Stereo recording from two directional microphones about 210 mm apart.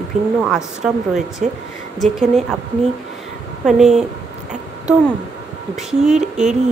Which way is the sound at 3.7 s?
Centre (ahead or behind).